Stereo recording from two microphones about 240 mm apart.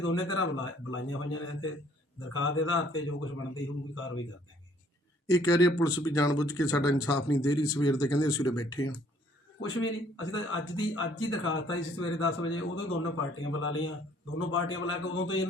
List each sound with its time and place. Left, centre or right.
0.0 s a man's voice: left
5.3 s speech: centre
9.6 s a man's voice: left